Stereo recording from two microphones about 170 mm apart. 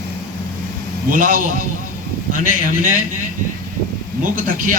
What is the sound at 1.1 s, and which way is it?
Speech, 50° right (ahead or behind).